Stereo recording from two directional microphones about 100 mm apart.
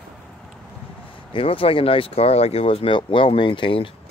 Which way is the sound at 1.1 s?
60° left (ahead or behind).